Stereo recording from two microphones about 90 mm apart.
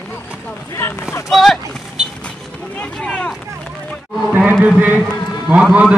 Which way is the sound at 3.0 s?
10° left (ahead or behind).